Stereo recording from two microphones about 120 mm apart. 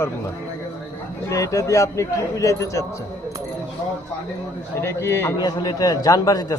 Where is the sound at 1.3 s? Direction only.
25° left (ahead or behind).